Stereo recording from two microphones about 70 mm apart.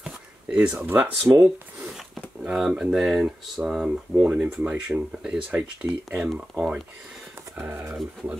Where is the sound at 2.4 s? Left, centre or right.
Centre.